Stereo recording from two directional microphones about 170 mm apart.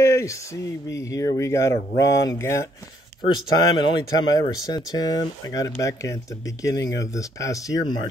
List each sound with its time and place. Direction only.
0.0 s a sound: 15° left (ahead or behind)
0.8 s speech: 20° left (ahead or behind)
3.5 s speech: 25° left (ahead or behind)